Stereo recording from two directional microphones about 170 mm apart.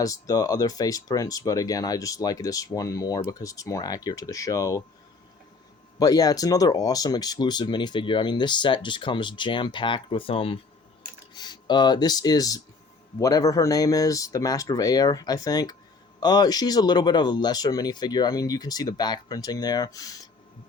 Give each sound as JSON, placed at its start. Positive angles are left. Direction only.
{"t": 0.0, "sound": "speech", "side_deg": 20}
{"t": 6.0, "sound": "speech", "side_deg": 20}